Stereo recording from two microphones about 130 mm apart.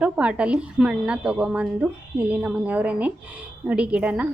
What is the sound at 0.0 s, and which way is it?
Speech, 10° right (ahead or behind).